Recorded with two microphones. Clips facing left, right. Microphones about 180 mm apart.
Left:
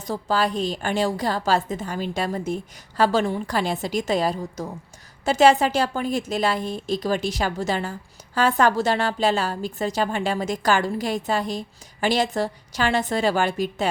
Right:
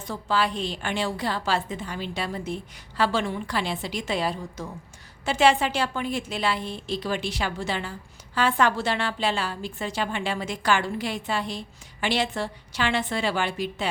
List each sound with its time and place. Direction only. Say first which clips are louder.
0.1 s a woman's voice: left 3 dB; 40° left (ahead or behind)